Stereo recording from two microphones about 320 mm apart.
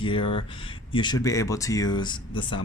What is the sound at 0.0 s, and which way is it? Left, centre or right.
Speech, centre.